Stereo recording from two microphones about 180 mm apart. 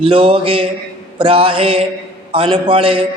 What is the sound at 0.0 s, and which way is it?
A man's voice, 30° right (ahead or behind).